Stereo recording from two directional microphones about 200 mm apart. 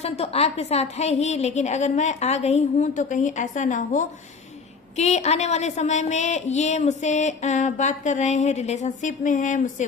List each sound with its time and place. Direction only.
0.0 s a woman's voice: 30° left (ahead or behind)